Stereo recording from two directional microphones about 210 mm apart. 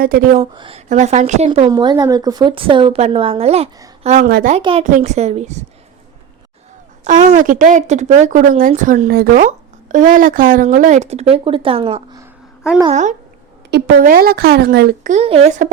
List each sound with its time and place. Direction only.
0.0 s speech: 45° right (ahead or behind)
0.5 s a woman's voice: 25° right (ahead or behind); by 4.5 s 45° right (ahead or behind)
4.5 s a woman's voice: 30° right (ahead or behind)
7.0 s speech: 35° right (ahead or behind)
13.7 s speech: 50° right (ahead or behind); by 15.7 s 35° right (ahead or behind)